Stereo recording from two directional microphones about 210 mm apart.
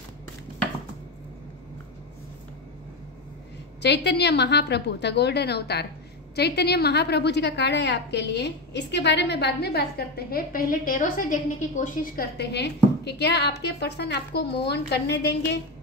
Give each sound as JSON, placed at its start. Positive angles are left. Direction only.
{"t": 3.8, "sound": "a woman's voice", "side_deg": 55}